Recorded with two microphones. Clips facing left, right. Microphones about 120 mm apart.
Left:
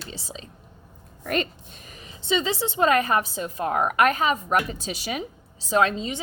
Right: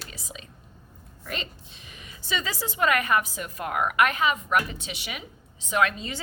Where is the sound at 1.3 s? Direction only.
50° left (ahead or behind).